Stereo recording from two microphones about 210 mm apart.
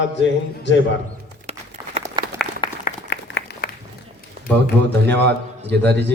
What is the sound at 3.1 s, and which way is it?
Applause, 55° left (ahead or behind).